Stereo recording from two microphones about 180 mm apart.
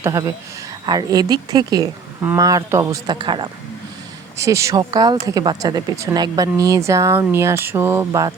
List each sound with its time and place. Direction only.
0.0 s speech: 20° right (ahead or behind)